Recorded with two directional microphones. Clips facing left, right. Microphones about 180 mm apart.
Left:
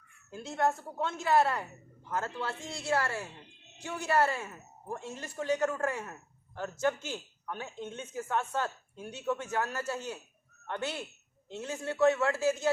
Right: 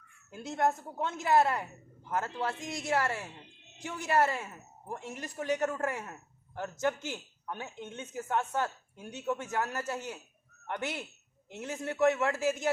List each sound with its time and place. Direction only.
0.3 s speech: 20° right (ahead or behind)